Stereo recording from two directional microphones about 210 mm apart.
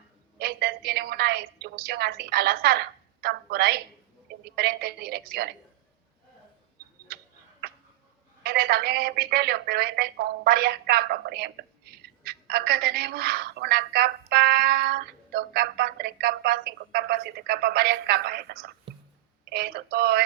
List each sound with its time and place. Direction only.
0.3 s a woman's voice: 50° right (ahead or behind)
7.1 s tick-tock: 45° right (ahead or behind)
8.4 s speech: 45° right (ahead or behind)